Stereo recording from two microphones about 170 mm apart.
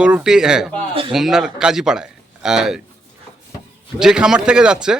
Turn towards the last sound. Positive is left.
turn(degrees=-5)  # may be behind; listen again after turning